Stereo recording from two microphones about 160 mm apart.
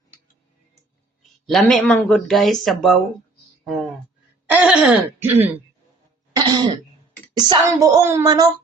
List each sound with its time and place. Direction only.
1.5 s speech: centre (ahead or behind)
4.5 s throat clearing: 5° right (ahead or behind)
6.3 s speech: 25° right (ahead or behind)